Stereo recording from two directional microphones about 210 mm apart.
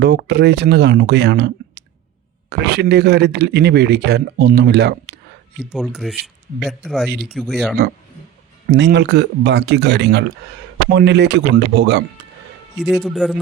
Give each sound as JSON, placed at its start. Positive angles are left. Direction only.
{"t": 0.0, "sound": "speech", "side_deg": -50}
{"t": 5.7, "sound": "speech", "side_deg": 0}
{"t": 8.7, "sound": "speech", "side_deg": -55}
{"t": 12.8, "sound": "speech", "side_deg": 0}